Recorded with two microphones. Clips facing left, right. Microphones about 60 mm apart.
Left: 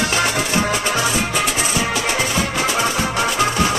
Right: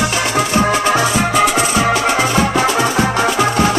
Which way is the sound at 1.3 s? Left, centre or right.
Right.